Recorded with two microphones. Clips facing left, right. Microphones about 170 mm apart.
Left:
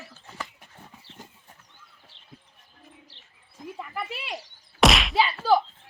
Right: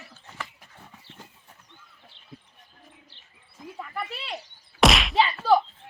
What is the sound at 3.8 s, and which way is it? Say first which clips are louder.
Speech: right 1 dB; 10° left (ahead or behind).